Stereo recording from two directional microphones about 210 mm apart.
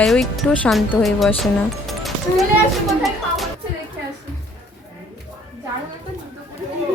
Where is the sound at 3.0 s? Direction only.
Centre (ahead or behind).